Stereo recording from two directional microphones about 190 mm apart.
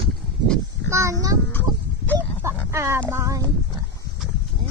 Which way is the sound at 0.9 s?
15° right (ahead or behind).